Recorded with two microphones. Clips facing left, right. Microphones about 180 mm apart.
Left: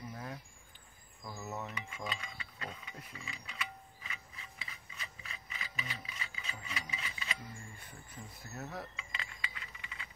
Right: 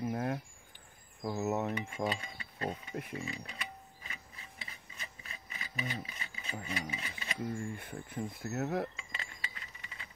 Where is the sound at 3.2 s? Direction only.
45° right (ahead or behind).